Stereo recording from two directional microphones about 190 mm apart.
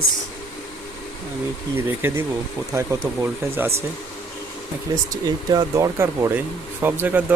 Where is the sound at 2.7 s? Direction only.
15° right (ahead or behind).